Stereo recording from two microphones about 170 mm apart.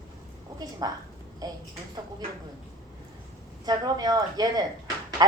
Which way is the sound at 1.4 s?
20° right (ahead or behind).